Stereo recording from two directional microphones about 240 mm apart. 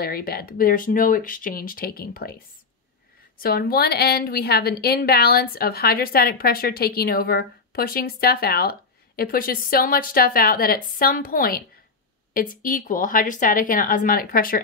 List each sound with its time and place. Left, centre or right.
0.0 s a woman's voice: left